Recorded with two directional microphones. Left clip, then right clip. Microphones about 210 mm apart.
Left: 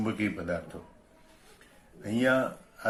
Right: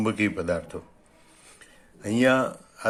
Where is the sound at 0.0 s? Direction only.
50° right (ahead or behind).